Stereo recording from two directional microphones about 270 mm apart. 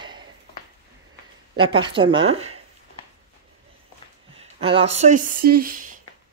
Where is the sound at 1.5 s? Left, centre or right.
Centre.